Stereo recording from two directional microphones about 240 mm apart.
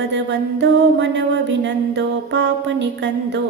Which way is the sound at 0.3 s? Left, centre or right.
Right.